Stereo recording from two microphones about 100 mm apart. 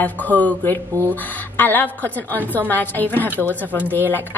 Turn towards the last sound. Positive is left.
turn(degrees=-15)  # may be behind; listen again after turning